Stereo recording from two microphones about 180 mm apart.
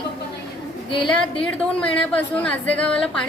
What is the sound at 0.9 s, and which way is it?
Speech, 25° left (ahead or behind).